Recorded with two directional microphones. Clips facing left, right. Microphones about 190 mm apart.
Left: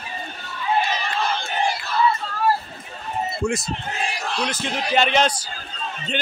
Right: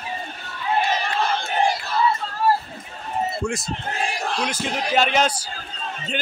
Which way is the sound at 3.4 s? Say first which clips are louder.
Left 6 dB; 25° left (ahead or behind).